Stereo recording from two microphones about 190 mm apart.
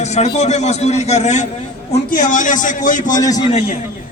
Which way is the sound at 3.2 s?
20° left (ahead or behind).